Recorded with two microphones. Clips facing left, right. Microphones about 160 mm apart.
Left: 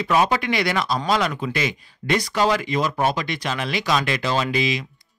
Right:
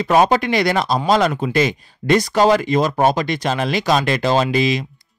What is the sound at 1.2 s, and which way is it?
Speech, 45° right (ahead or behind).